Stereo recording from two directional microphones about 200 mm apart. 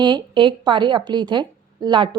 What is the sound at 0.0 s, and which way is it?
A woman's voice, 25° right (ahead or behind).